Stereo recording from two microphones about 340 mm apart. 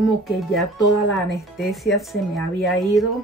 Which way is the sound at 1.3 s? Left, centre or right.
Centre.